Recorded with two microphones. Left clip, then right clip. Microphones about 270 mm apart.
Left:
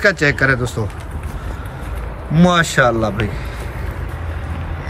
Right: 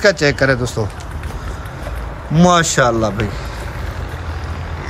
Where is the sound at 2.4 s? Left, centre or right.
Centre.